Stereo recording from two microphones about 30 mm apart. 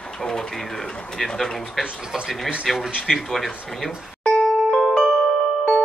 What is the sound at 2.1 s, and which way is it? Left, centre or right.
Speech, centre.